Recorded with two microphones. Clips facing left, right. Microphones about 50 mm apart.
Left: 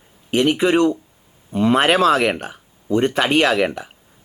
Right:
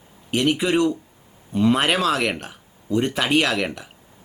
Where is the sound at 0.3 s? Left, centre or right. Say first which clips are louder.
Left 4 dB; centre.